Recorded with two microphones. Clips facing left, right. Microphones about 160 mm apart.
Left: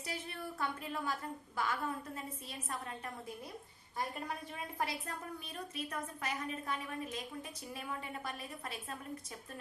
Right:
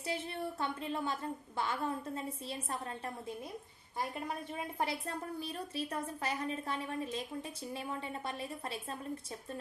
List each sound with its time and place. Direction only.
0.0 s a woman's voice: 25° right (ahead or behind)
4.8 s a woman's voice: 30° right (ahead or behind)